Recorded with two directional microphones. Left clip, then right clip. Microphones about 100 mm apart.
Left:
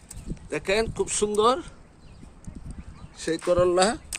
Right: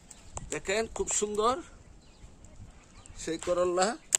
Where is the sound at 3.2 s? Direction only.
50° left (ahead or behind).